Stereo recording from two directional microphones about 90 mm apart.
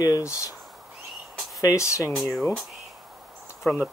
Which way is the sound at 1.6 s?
35° left (ahead or behind).